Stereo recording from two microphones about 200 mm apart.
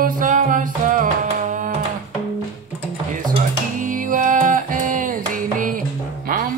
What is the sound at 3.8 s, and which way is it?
Music, 40° right (ahead or behind).